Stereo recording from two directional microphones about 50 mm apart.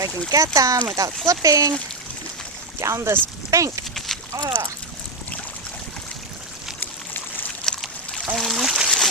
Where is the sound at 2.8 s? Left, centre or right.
Right.